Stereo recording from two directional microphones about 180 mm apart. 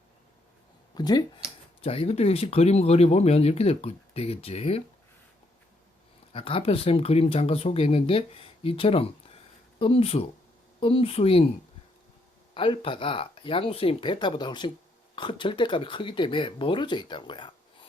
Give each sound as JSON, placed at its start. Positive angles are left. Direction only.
{"t": 0.9, "sound": "speech", "side_deg": 25}
{"t": 6.3, "sound": "speech", "side_deg": 30}
{"t": 12.5, "sound": "speech", "side_deg": 30}